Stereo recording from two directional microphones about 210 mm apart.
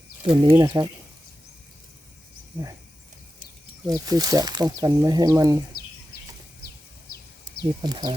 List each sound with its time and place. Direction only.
0.2 s speech: 25° right (ahead or behind)
3.8 s speech: 15° right (ahead or behind)
7.8 s speech: 20° right (ahead or behind)